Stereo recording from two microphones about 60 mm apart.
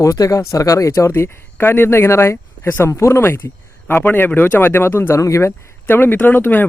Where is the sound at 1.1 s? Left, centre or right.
Left.